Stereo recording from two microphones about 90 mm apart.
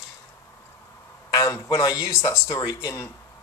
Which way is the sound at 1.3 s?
35° left (ahead or behind).